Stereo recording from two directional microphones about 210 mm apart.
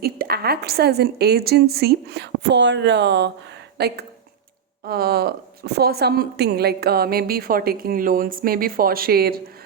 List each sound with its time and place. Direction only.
0.0 s a woman's voice: 45° right (ahead or behind)